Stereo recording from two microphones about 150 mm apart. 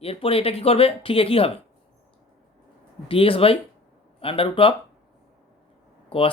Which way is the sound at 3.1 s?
35° left (ahead or behind).